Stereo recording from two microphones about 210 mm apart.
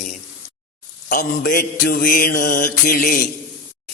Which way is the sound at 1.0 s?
45° left (ahead or behind).